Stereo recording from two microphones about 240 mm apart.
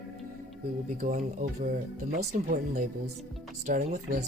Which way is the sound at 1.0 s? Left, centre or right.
Right.